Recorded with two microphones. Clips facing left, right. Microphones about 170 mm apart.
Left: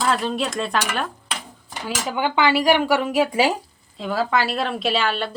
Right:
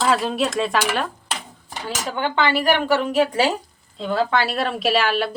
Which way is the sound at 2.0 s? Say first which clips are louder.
Left 1 dB; 10° left (ahead or behind).